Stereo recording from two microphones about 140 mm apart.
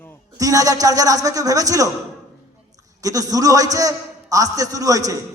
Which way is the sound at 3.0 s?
25° right (ahead or behind).